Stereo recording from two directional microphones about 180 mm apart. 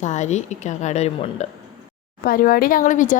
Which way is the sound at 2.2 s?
55° left (ahead or behind).